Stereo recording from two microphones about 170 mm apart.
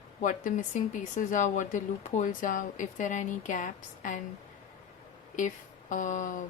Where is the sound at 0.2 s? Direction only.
50° left (ahead or behind).